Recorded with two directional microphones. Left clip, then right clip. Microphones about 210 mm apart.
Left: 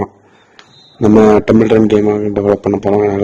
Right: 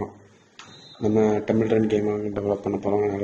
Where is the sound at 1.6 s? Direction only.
50° left (ahead or behind).